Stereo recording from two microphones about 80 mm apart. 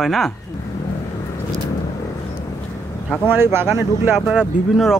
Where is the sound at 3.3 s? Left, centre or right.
Right.